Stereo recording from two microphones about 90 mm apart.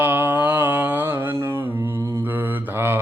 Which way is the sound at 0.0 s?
20° right (ahead or behind).